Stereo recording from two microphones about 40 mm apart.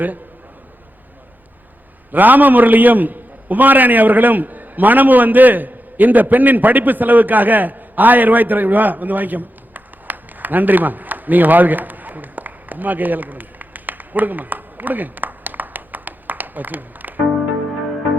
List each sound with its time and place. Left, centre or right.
2.1 s a man's voice: right